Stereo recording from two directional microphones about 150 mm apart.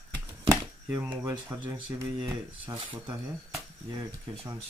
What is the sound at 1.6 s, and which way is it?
Speech, 15° right (ahead or behind).